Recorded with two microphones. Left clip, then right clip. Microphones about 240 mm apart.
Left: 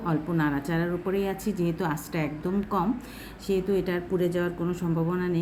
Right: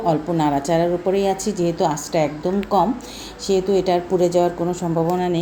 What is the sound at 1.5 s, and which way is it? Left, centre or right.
Speech, centre.